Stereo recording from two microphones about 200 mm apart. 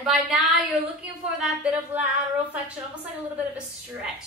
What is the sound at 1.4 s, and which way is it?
A woman's voice, 5° right (ahead or behind).